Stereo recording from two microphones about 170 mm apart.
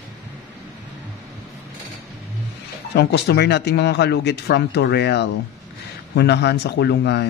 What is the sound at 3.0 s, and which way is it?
Speech, 80° left.